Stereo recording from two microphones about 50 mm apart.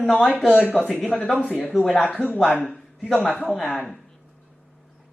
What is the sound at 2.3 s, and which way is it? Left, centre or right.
Speech, left.